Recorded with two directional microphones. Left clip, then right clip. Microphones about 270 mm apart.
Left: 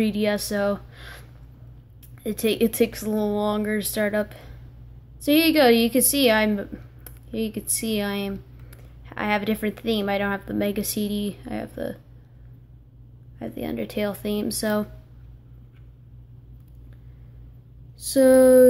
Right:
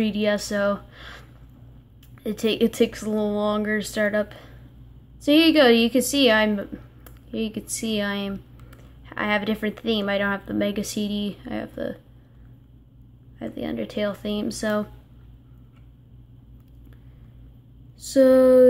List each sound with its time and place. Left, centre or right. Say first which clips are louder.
0.0 s a woman's voice: right 1 dB; centre
2.2 s a woman's voice: even; centre
13.4 s a woman's voice: even; centre
18.0 s a woman's voice: even; centre